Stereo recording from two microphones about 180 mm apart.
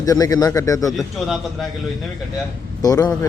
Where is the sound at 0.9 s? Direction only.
Centre (ahead or behind).